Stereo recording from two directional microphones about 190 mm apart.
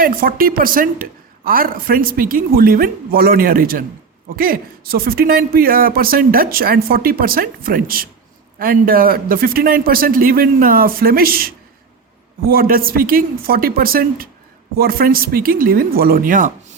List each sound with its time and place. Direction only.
0.0 s speech: 50° right (ahead or behind)